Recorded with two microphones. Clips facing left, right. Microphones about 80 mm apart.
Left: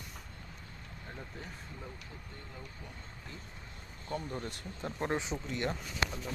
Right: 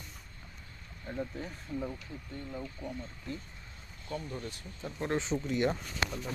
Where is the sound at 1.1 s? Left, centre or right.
Centre.